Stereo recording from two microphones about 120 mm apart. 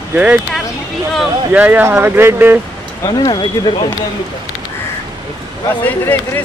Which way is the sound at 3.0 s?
35° left (ahead or behind).